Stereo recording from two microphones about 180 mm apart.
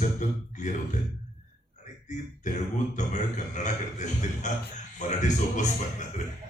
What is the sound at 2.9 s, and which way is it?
A man's voice, 40° left (ahead or behind).